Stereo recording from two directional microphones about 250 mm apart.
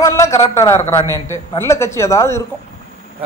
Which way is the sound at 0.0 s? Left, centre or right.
Centre.